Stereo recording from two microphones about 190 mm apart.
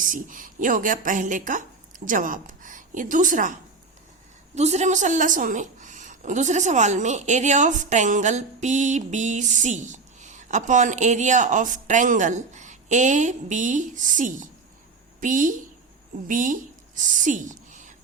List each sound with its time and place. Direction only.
0.0 s a woman's voice: 45° right (ahead or behind)